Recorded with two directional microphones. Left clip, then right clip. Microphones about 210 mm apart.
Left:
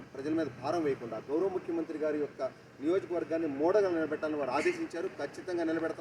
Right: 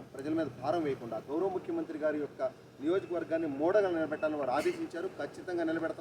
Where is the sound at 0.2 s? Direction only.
15° right (ahead or behind).